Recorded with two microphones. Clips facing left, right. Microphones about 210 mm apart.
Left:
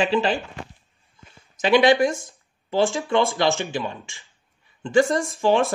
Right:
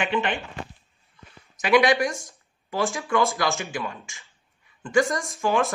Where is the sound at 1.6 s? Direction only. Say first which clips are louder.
Left 3 dB; 30° left (ahead or behind).